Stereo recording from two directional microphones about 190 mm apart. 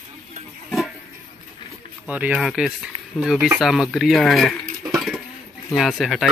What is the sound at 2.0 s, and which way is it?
Speech, 5° right (ahead or behind).